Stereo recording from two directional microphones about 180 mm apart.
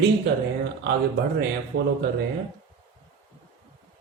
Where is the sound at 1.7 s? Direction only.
65° right (ahead or behind).